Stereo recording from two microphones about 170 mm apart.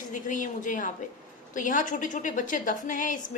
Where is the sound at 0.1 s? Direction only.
50° left (ahead or behind).